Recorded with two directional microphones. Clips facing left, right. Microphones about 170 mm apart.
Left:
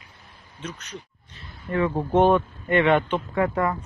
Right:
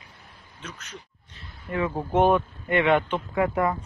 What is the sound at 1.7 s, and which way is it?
Speech, 10° right (ahead or behind).